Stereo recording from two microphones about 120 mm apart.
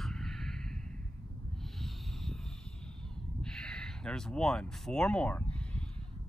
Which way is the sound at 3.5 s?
5° left (ahead or behind).